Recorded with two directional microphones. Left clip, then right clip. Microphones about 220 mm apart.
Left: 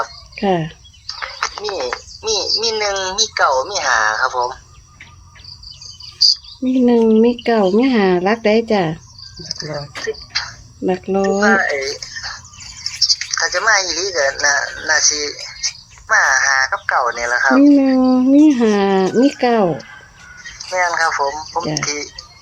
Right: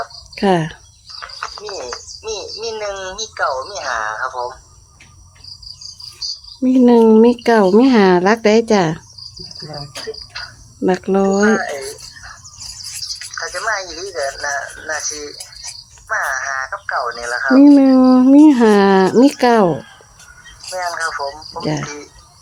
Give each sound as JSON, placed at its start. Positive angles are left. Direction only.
{"t": 0.3, "sound": "speech", "side_deg": -10}
{"t": 1.0, "sound": "bird", "side_deg": 50}
{"t": 2.6, "sound": "speech", "side_deg": 45}
{"t": 6.6, "sound": "speech", "side_deg": -10}
{"t": 9.6, "sound": "speech", "side_deg": 50}
{"t": 10.8, "sound": "speech", "side_deg": -10}
{"t": 11.4, "sound": "speech", "side_deg": 55}
{"t": 13.0, "sound": "speech", "side_deg": 45}
{"t": 17.7, "sound": "speech", "side_deg": -10}
{"t": 20.7, "sound": "speech", "side_deg": 55}